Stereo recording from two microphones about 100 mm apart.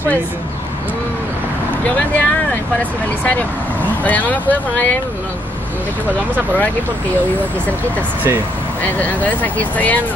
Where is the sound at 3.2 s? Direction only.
15° left (ahead or behind).